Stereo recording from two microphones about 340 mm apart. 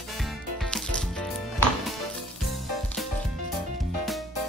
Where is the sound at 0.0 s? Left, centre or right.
Centre.